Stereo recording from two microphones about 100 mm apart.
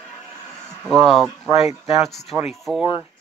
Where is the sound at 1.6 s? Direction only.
90° left.